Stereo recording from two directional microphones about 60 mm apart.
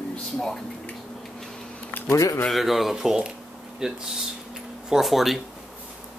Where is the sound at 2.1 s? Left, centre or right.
Left.